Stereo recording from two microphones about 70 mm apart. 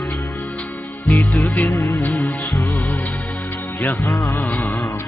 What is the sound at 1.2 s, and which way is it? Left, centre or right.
Music, left.